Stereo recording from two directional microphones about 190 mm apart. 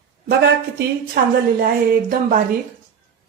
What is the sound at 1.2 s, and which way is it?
A woman's voice, 50° right (ahead or behind).